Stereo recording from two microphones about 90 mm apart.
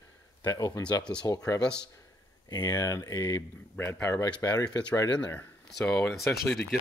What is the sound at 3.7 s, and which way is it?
Speech, 25° left (ahead or behind).